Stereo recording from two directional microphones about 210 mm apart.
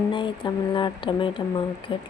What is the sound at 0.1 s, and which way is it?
Speech, 20° left (ahead or behind).